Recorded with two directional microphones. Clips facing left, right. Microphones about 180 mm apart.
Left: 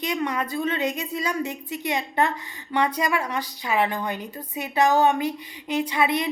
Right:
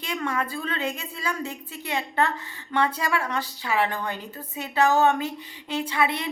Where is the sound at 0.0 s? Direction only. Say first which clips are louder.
Left 2 dB; 15° left (ahead or behind).